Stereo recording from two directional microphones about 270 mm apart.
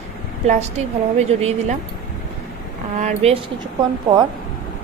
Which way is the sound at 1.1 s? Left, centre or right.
Right.